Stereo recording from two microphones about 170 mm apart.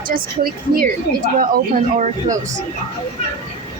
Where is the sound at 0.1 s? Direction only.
60° right (ahead or behind).